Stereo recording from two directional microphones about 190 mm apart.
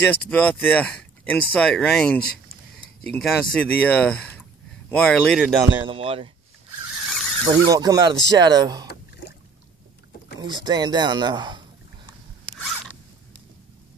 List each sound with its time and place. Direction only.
0.0 s speech: 10° left (ahead or behind)
5.9 s speech: 30° right (ahead or behind)
7.4 s speech: 20° right (ahead or behind)
10.4 s speech: 20° right (ahead or behind)